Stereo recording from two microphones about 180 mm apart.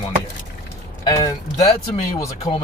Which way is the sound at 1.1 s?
20° left (ahead or behind).